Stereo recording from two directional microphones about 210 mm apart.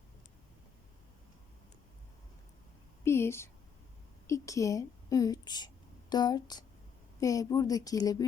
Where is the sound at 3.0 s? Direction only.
10° left (ahead or behind).